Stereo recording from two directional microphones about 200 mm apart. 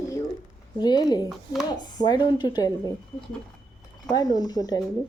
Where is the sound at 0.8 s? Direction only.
20° left (ahead or behind).